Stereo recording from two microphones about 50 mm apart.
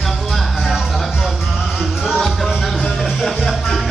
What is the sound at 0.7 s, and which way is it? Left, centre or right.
Music, centre.